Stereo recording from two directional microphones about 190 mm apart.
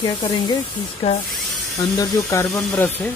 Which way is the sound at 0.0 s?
20° left (ahead or behind).